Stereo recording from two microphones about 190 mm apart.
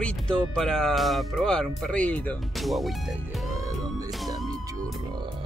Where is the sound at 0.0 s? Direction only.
5° left (ahead or behind).